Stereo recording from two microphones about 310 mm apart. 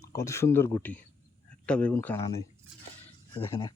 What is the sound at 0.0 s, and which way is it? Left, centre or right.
Speech, centre.